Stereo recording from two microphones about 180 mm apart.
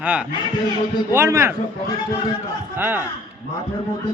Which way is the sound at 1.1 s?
15° right (ahead or behind).